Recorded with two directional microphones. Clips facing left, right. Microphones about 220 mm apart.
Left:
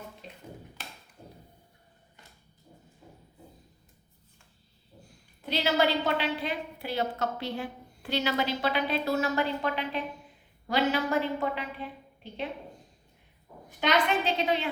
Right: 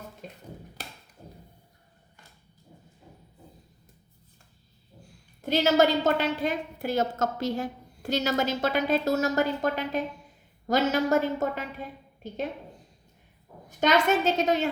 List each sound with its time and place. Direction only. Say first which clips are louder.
0.2 s a sound: right 2 dB; 45° right (ahead or behind)
5.4 s a woman's voice: right 5 dB; 45° right (ahead or behind)
13.7 s a woman's voice: right 4 dB; 45° right (ahead or behind)